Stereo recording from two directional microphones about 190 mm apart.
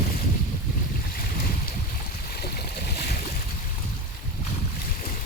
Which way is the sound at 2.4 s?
55° left (ahead or behind).